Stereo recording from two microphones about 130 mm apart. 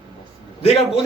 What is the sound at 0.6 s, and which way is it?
Speech, 45° left (ahead or behind).